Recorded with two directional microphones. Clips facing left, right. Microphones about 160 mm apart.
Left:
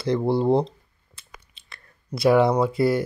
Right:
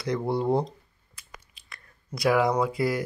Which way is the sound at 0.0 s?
30° left (ahead or behind).